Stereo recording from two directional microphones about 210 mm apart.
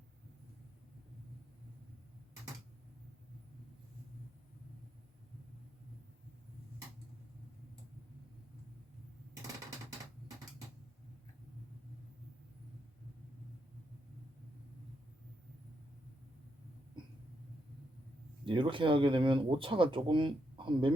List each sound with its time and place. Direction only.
18.4 s speech: 25° right (ahead or behind)